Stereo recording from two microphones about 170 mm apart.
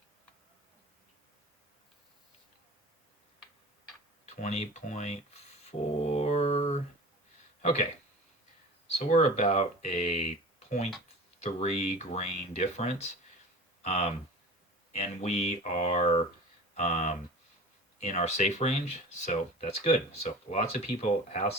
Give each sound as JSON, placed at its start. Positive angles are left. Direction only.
{"t": 4.3, "sound": "a sound", "side_deg": 40}
{"t": 7.6, "sound": "speech", "side_deg": 45}
{"t": 8.9, "sound": "speech", "side_deg": 40}
{"t": 11.3, "sound": "speech", "side_deg": 40}